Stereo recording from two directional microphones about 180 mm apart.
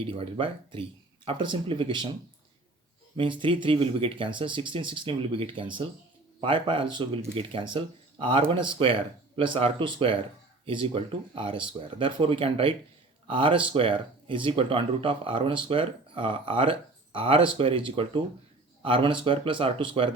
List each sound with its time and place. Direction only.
0.0 s speech: 30° right (ahead or behind)
3.2 s speech: 25° right (ahead or behind)